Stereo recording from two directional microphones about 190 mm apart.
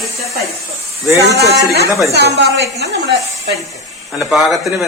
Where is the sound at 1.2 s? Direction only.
60° right (ahead or behind).